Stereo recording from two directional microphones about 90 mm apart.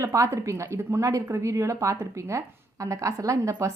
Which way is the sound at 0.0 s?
35° right (ahead or behind).